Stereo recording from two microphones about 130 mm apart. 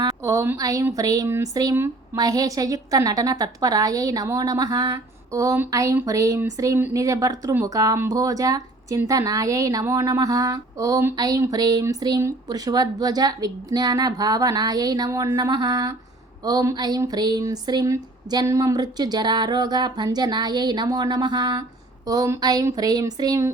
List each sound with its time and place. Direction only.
0.0 s speech: 25° right (ahead or behind)